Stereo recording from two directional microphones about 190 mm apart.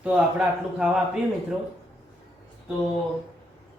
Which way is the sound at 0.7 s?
5° right (ahead or behind).